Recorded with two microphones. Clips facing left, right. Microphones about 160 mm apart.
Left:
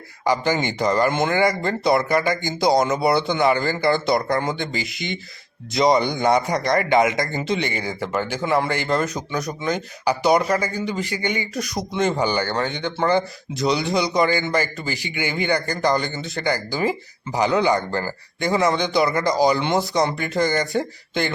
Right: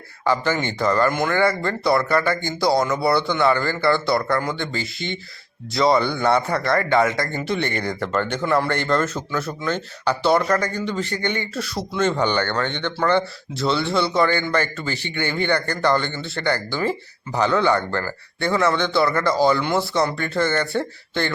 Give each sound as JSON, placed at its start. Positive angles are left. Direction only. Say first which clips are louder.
{"t": 0.3, "sound": "speech", "louder": "left 1 dB", "side_deg": 15}